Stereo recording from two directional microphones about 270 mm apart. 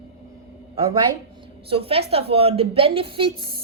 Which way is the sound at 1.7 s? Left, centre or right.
Right.